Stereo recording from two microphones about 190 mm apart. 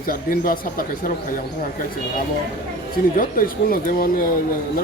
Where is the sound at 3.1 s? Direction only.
45° left (ahead or behind).